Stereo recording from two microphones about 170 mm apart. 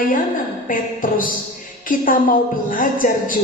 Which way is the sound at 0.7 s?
55° left (ahead or behind).